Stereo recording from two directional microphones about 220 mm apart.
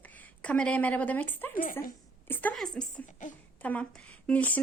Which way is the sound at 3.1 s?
35° left (ahead or behind).